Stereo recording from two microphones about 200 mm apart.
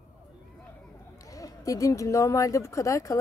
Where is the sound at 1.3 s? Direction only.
15° left (ahead or behind).